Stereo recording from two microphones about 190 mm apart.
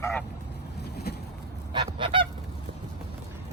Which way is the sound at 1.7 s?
25° right (ahead or behind).